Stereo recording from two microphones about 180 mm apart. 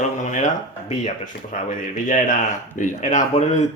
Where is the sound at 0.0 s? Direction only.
40° left (ahead or behind).